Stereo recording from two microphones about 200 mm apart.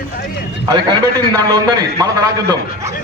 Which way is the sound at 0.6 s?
15° right (ahead or behind).